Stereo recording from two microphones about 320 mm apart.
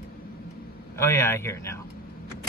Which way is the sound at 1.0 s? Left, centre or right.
Centre.